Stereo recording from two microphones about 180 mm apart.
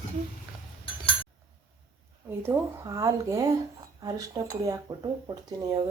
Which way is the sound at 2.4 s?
15° right (ahead or behind).